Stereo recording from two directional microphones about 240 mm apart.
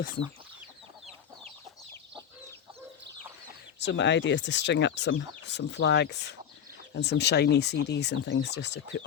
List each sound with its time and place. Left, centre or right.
3.8 s speech: left